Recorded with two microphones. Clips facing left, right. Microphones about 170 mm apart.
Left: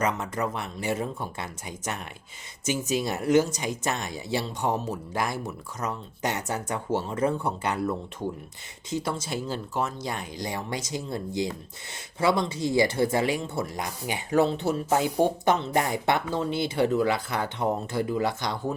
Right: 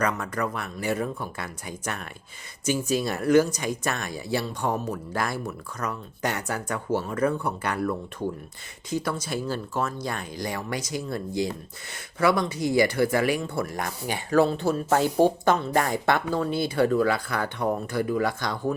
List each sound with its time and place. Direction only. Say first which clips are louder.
0.0 s speech: right 1 dB; 20° left (ahead or behind)